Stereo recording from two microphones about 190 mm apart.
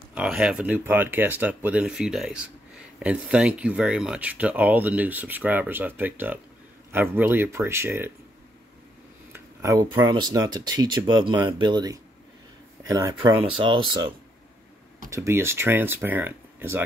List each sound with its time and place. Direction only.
0.1 s speech: 5° right (ahead or behind)
9.3 s speech: 15° right (ahead or behind)